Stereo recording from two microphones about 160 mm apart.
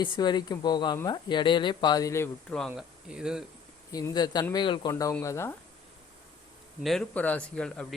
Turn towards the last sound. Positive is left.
turn(degrees=5)  # may be behind; listen again after turning